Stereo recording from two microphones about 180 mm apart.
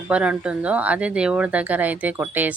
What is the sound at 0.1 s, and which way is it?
A woman's voice, 5° right (ahead or behind).